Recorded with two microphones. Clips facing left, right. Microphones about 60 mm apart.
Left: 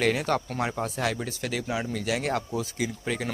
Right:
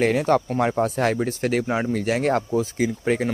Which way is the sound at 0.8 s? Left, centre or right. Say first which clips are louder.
Right 7 dB; right.